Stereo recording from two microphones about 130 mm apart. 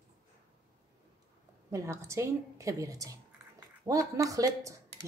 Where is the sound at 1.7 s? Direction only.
20° right (ahead or behind).